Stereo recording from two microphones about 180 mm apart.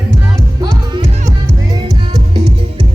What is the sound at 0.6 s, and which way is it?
Music, 20° right (ahead or behind).